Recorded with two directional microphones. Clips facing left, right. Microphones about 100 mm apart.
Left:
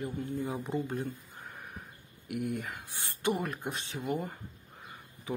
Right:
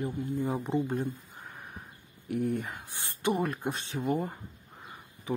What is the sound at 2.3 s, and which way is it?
Speech, 40° right (ahead or behind).